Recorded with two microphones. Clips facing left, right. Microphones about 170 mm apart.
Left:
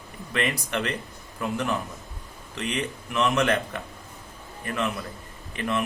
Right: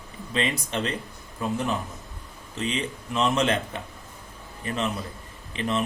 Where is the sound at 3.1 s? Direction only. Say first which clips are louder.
Even; 25° right (ahead or behind).